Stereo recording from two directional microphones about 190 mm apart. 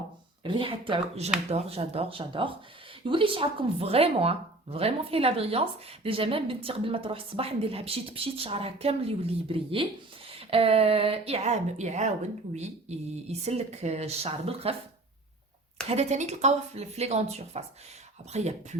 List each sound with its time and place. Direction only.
0.4 s speech: 25° right (ahead or behind)
15.9 s speech: 35° right (ahead or behind)